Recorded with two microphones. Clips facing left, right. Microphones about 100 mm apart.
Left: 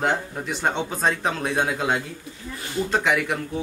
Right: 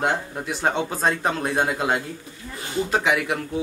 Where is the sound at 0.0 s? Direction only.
5° right (ahead or behind).